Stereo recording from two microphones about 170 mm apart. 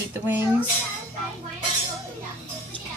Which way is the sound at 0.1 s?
15° right (ahead or behind).